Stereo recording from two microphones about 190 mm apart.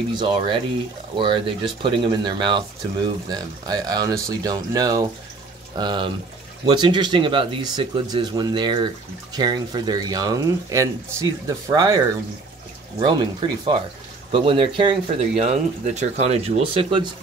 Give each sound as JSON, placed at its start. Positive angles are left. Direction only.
{"t": 0.2, "sound": "speech", "side_deg": -25}
{"t": 13.0, "sound": "speech", "side_deg": -25}